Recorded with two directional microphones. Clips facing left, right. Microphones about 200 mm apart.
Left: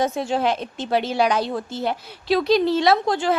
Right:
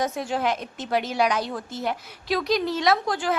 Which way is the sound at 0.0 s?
25° left (ahead or behind).